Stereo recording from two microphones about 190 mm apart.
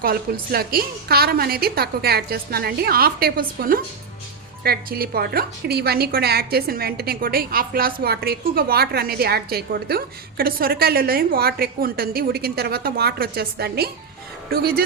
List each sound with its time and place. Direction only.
0.0 s a woman's voice: 50° right (ahead or behind)